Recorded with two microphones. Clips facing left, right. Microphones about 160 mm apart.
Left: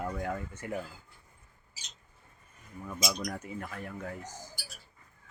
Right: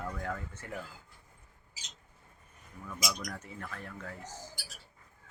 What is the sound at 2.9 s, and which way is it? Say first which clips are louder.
Speech: left 4 dB; 25° left (ahead or behind).